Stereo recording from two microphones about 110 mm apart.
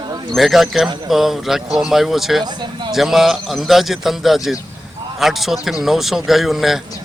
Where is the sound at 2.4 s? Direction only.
40° right (ahead or behind).